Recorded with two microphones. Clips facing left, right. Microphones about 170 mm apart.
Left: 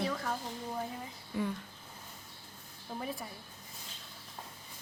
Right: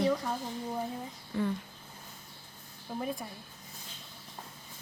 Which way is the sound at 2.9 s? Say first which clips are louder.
Right 4 dB; 10° right (ahead or behind).